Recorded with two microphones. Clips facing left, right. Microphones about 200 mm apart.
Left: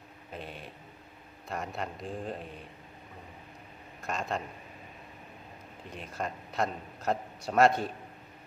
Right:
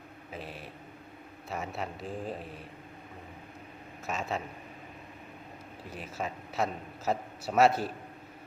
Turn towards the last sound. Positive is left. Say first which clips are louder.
# even
turn(degrees=-5)  # may be behind; listen again after turning